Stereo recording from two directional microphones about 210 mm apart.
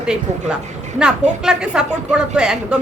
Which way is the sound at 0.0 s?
5° right (ahead or behind).